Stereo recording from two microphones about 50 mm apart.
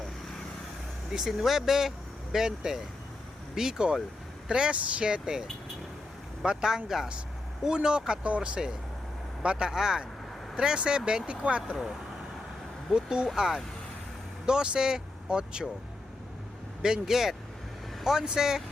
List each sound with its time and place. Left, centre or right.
1.3 s speech: centre; by 11.8 s right
12.9 s speech: centre
16.8 s speech: centre